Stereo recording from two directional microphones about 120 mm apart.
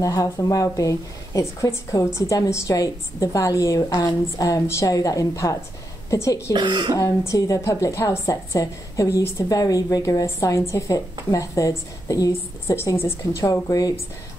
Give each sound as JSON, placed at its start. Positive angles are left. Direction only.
{"t": 0.0, "sound": "a woman's voice", "side_deg": 30}
{"t": 6.5, "sound": "speech", "side_deg": -40}
{"t": 7.0, "sound": "a woman's voice", "side_deg": 30}